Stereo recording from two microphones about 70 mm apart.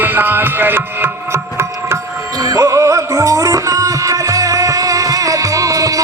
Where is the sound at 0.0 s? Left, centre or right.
Right.